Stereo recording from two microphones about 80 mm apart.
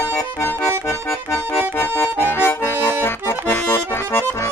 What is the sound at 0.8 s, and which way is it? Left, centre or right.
Accordion, left.